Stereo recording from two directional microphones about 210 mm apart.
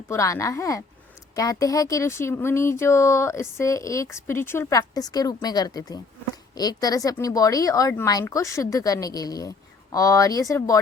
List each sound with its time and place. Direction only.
0.1 s speech: 15° left (ahead or behind)